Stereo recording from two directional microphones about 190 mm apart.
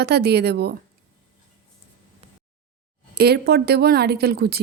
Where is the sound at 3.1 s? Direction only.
55° right (ahead or behind).